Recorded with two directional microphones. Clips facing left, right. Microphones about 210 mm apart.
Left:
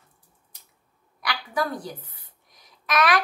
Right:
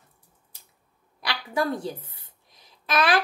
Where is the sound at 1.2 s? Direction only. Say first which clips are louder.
Right 1 dB; 25° right (ahead or behind).